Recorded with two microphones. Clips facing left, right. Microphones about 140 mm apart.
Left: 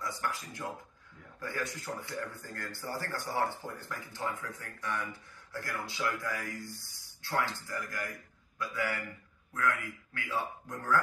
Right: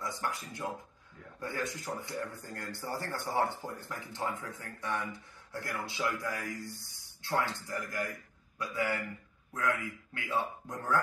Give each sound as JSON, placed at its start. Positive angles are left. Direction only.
{"t": 0.0, "sound": "speech", "side_deg": -20}